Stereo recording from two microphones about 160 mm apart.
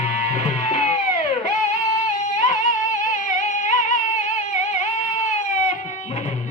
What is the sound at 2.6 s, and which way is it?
Music, 50° left (ahead or behind).